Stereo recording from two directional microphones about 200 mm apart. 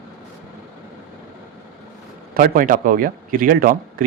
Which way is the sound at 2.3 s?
45° right (ahead or behind).